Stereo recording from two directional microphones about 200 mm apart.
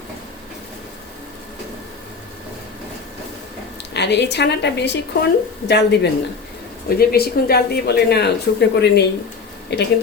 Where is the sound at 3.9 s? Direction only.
60° left (ahead or behind).